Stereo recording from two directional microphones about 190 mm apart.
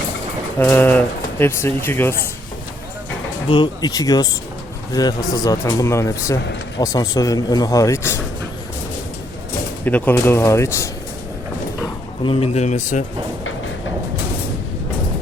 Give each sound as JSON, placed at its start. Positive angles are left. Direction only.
{"t": 0.6, "sound": "speech", "side_deg": 10}
{"t": 3.5, "sound": "speech", "side_deg": 20}
{"t": 9.8, "sound": "speech", "side_deg": 10}
{"t": 12.2, "sound": "speech", "side_deg": 30}